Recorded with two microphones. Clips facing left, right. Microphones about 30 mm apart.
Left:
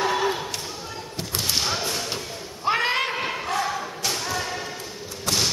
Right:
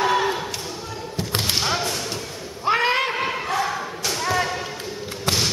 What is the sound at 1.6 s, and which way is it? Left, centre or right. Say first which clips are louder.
Thump: right 3 dB; centre.